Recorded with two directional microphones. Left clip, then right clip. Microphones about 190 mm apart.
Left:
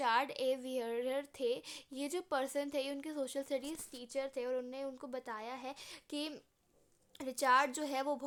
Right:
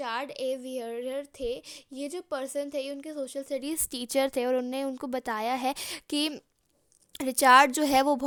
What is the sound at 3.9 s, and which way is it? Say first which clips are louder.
A woman's voice: right 13 dB; 55° right (ahead or behind).